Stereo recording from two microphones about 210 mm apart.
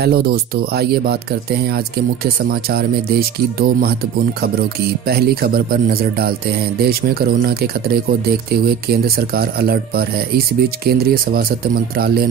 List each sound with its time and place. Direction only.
0.0 s speech: 50° right (ahead or behind)
5.0 s speech: 50° right (ahead or behind)